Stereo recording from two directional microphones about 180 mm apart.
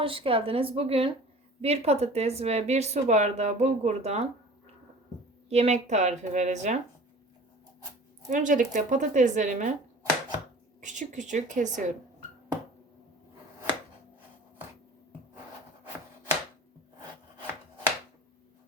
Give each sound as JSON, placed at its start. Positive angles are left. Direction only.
{"t": 0.0, "sound": "speech", "side_deg": -30}
{"t": 5.5, "sound": "speech", "side_deg": -35}
{"t": 8.3, "sound": "a woman's voice", "side_deg": -45}
{"t": 10.8, "sound": "a woman's voice", "side_deg": -45}